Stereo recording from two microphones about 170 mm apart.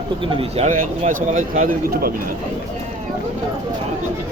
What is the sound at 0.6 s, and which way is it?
Speech, 45° right (ahead or behind).